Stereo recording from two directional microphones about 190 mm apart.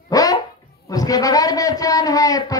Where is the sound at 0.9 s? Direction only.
20° left (ahead or behind).